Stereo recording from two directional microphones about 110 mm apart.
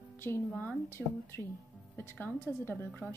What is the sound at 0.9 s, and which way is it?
Speech, 25° left (ahead or behind).